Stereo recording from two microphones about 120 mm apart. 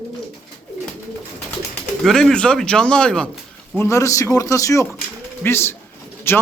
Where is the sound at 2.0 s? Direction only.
5° left (ahead or behind).